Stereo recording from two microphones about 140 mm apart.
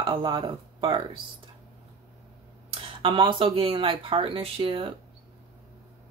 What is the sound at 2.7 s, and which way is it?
Speech, 40° right (ahead or behind).